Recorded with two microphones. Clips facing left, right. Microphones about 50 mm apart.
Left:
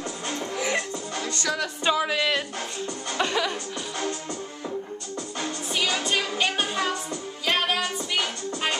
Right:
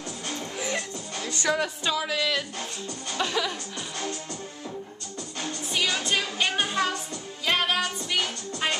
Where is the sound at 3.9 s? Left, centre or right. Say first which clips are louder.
Left 3 dB; left.